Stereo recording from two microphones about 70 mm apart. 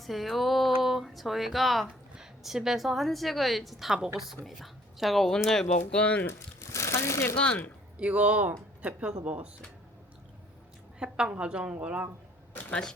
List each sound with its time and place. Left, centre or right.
0.0 s a woman's voice: centre
6.2 s speech: left
7.3 s speech: centre
7.9 s a woman's voice: centre
11.0 s a woman's voice: centre
12.5 s a sound: left